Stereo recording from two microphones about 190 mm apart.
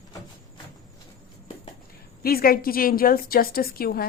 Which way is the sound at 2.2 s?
50° left (ahead or behind).